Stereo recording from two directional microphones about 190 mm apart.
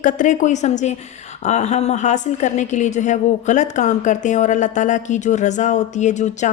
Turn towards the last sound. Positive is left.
turn(degrees=40)  # may be behind; listen again after turning